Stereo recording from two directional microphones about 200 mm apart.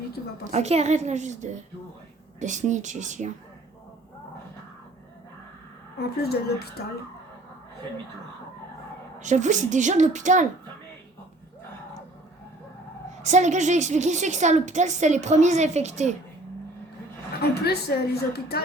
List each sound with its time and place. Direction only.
0.2 s a woman's voice: 45° left (ahead or behind)
0.5 s a woman's voice: 30° right (ahead or behind)
6.0 s a woman's voice: 50° left (ahead or behind)
9.2 s a woman's voice: 40° right (ahead or behind)
13.2 s a woman's voice: 35° right (ahead or behind)
17.4 s a woman's voice: 55° left (ahead or behind)